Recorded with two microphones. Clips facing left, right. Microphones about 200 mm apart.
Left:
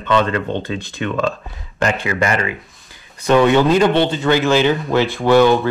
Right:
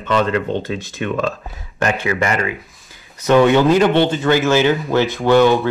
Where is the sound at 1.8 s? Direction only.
15° right (ahead or behind).